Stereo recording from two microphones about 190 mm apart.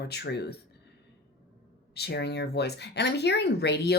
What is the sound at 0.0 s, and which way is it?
Speech, 60° left (ahead or behind).